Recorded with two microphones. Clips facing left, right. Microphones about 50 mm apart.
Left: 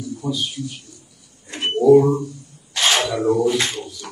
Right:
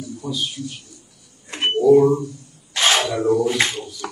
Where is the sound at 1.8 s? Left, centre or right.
Centre.